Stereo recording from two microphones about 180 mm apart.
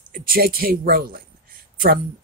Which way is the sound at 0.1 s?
55° right (ahead or behind).